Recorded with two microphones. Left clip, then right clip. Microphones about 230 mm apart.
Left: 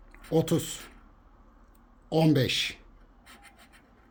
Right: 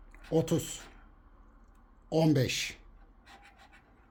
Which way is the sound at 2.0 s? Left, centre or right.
Centre.